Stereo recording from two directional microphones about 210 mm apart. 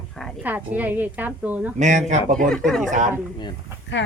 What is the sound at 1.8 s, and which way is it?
Speech, 35° right (ahead or behind).